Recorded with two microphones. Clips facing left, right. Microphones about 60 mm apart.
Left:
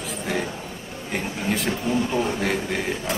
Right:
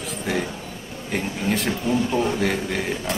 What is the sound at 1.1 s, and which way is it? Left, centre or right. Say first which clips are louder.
A woman's voice: right 2 dB; centre.